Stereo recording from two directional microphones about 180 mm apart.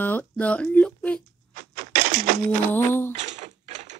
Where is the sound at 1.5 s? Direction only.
50° right (ahead or behind).